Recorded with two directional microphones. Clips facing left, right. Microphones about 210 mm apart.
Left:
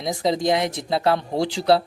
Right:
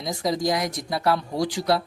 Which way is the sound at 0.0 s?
20° left (ahead or behind).